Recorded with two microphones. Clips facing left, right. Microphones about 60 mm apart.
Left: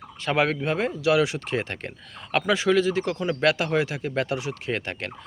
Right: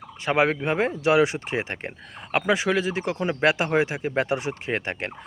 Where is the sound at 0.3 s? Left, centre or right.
Centre.